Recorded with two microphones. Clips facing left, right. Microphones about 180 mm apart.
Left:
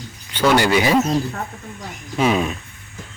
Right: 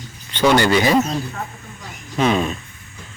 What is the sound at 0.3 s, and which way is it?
Speech, 10° left (ahead or behind).